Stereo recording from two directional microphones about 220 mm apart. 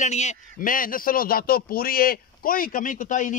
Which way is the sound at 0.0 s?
30° left (ahead or behind).